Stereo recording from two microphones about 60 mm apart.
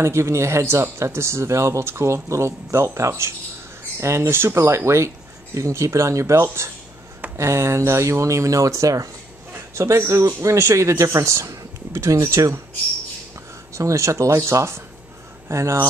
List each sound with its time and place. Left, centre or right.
0.0 s speech: right
9.8 s speech: right
13.7 s speech: right